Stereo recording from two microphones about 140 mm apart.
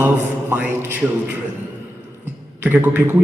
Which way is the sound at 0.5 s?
15° right (ahead or behind).